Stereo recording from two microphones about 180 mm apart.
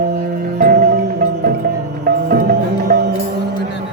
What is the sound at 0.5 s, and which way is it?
Music, 50° right (ahead or behind).